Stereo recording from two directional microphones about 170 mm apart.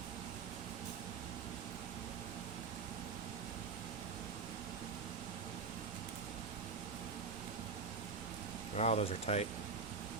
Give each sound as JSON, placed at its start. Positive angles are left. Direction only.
{"t": 8.7, "sound": "speech", "side_deg": 40}